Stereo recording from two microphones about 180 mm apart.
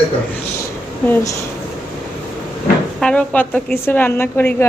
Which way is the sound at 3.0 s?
5° left (ahead or behind).